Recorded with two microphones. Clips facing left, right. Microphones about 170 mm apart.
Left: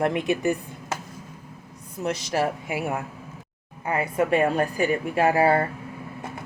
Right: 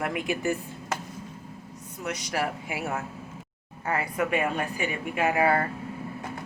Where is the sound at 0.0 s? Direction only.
25° left (ahead or behind).